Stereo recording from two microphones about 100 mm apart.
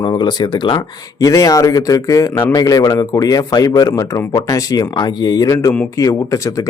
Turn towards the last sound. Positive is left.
turn(degrees=35)  # may be behind; listen again after turning